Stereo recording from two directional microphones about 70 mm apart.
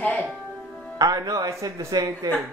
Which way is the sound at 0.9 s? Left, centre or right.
Right.